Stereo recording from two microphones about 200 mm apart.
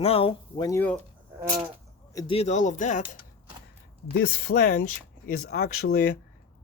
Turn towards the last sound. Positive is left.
turn(degrees=50)  # may be behind; listen again after turning